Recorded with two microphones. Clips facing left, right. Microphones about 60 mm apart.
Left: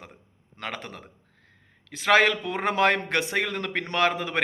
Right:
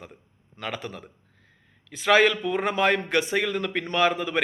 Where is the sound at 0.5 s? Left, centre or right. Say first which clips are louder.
Right 2 dB; left.